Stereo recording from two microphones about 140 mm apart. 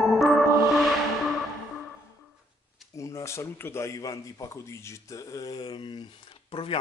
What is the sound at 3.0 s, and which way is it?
Speech, 20° left (ahead or behind).